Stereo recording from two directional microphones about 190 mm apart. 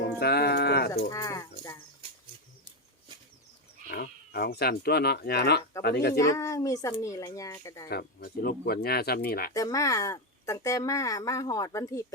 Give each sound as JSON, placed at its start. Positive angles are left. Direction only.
{"t": 0.2, "sound": "speech", "side_deg": 60}
{"t": 1.1, "sound": "speech", "side_deg": 15}
{"t": 2.0, "sound": "a sound", "side_deg": -30}
{"t": 3.8, "sound": "speech", "side_deg": 50}
{"t": 6.1, "sound": "speech", "side_deg": 15}
{"t": 7.9, "sound": "speech", "side_deg": 55}
{"t": 9.5, "sound": "speech", "side_deg": 15}